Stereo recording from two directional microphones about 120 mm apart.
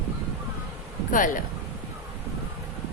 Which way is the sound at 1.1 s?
90° left.